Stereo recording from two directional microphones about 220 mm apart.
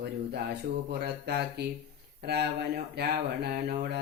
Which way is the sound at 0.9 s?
45° right (ahead or behind).